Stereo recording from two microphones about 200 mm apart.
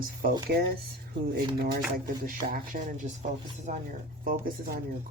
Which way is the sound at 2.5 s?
40° right (ahead or behind).